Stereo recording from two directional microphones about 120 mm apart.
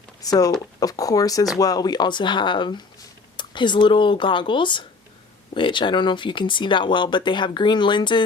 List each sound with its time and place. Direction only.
0.2 s speech: 30° left (ahead or behind)